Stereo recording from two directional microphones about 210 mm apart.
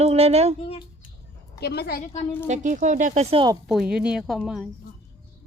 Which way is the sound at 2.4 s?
35° right (ahead or behind).